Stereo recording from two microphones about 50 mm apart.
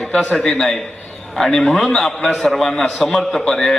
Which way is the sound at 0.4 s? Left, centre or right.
Centre.